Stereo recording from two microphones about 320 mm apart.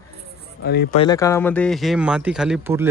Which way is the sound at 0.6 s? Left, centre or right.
Left.